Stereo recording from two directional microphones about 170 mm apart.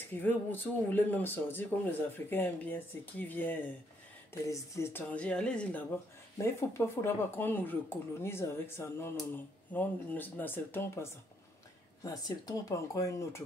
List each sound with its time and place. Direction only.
0.1 s speech: 10° left (ahead or behind)